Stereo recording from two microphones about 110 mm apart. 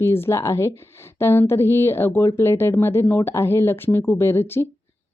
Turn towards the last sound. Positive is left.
turn(degrees=20)  # may be behind; listen again after turning